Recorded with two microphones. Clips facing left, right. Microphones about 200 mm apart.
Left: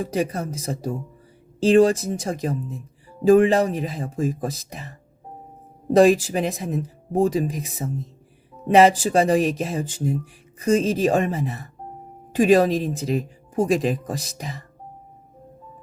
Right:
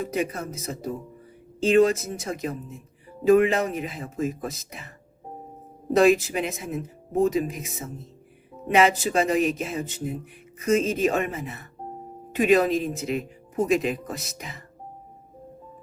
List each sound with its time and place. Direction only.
0.0 s speech: 35° left (ahead or behind)
6.0 s speech: 35° left (ahead or behind)